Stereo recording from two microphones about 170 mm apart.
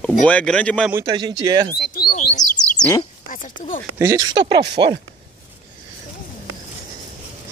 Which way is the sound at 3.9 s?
20° right (ahead or behind).